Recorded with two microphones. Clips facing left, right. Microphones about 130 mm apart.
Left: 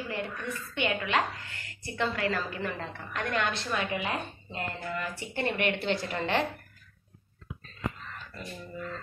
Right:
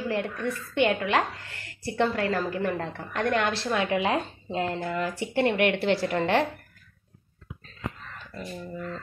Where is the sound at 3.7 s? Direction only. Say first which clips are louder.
Right 9 dB; 85° right.